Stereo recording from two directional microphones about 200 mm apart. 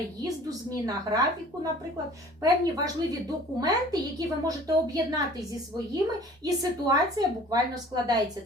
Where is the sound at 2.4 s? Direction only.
20° right (ahead or behind).